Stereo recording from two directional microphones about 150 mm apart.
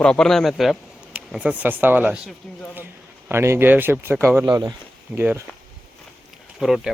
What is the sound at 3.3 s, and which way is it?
Speech, 15° right (ahead or behind).